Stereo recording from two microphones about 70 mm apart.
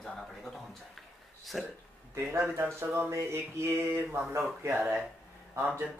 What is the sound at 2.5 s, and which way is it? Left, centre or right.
Speech, right.